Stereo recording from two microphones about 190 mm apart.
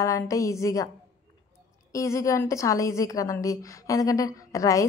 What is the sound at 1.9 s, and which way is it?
A woman's voice, 15° left (ahead or behind).